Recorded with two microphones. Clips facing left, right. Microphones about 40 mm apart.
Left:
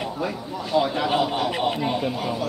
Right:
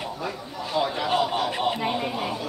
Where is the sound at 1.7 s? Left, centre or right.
Centre.